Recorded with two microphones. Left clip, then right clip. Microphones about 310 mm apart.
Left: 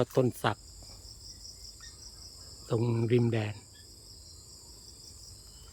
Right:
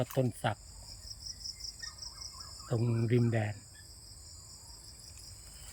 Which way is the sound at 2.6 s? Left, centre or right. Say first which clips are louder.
Left 5 dB; centre.